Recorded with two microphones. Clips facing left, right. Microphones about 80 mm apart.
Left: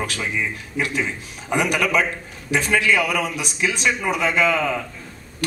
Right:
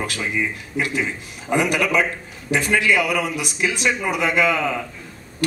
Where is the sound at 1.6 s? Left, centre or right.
Centre.